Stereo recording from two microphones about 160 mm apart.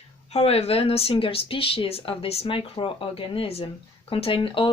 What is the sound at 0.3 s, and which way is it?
Speech, 40° left (ahead or behind).